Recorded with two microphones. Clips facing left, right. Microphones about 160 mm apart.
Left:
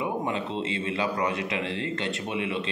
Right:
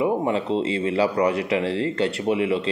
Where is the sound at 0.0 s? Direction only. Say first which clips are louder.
Right 7 dB; 30° right (ahead or behind).